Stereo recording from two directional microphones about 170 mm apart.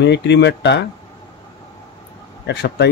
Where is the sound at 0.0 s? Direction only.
85° left.